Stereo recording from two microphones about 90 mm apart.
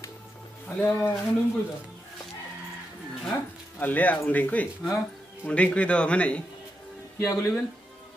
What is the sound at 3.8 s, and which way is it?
A man's voice, 20° left (ahead or behind).